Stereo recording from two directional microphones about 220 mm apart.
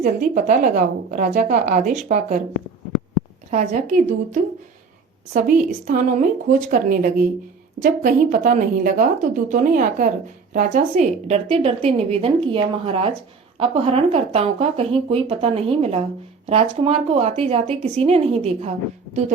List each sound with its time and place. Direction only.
0.0 s a woman's voice: 35° right (ahead or behind)
3.5 s a woman's voice: 35° right (ahead or behind)